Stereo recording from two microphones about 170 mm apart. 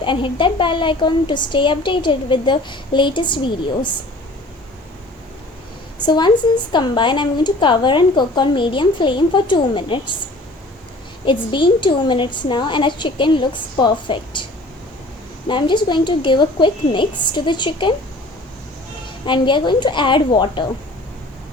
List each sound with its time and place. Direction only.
0.0 s a woman's voice: 30° left (ahead or behind)
6.1 s a woman's voice: 25° left (ahead or behind)
11.3 s a woman's voice: 30° left (ahead or behind)
15.4 s a woman's voice: 30° left (ahead or behind)
19.2 s a woman's voice: 30° left (ahead or behind)